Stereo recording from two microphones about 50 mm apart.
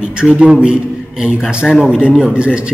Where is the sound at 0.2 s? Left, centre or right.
Centre.